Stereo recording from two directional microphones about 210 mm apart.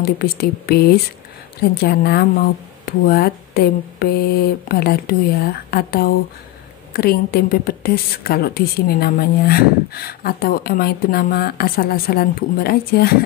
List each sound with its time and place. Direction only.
0.0 s a woman's voice: 45° left (ahead or behind)